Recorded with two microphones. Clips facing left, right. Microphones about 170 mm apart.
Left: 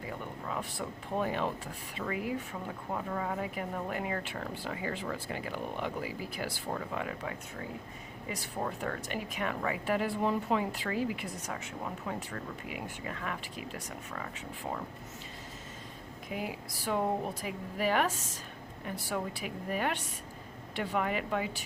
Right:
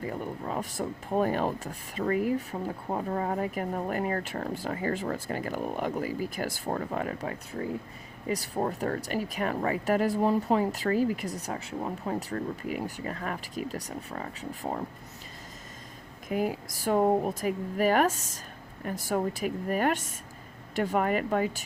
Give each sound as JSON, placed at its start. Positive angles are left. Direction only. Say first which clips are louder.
{"t": 0.0, "sound": "speech", "louder": "right 6 dB", "side_deg": -40}
{"t": 16.3, "sound": "speech", "louder": "right 9 dB", "side_deg": -45}